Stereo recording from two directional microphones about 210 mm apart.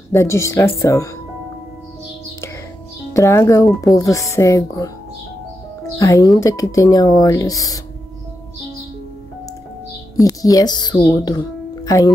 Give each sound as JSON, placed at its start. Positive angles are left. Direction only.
{"t": 0.1, "sound": "speech", "side_deg": 15}
{"t": 3.1, "sound": "speech", "side_deg": 15}
{"t": 5.9, "sound": "speech", "side_deg": 15}
{"t": 10.2, "sound": "a woman's voice", "side_deg": 15}
{"t": 11.2, "sound": "music", "side_deg": 15}